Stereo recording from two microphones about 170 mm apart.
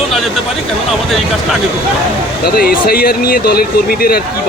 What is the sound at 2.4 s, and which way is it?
Speech, 65° left (ahead or behind).